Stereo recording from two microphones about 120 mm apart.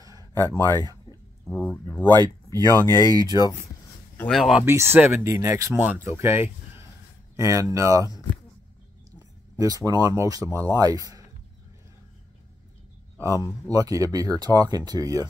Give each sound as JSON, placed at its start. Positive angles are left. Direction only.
{"t": 0.4, "sound": "speech", "side_deg": 25}
{"t": 1.4, "sound": "speech", "side_deg": 10}
{"t": 2.0, "sound": "speech", "side_deg": -35}
{"t": 2.7, "sound": "speech", "side_deg": 25}
{"t": 3.1, "sound": "speech", "side_deg": -35}
{"t": 4.2, "sound": "speech", "side_deg": 0}
{"t": 4.6, "sound": "speech", "side_deg": -20}
{"t": 9.6, "sound": "speech", "side_deg": -30}
{"t": 13.4, "sound": "speech", "side_deg": -30}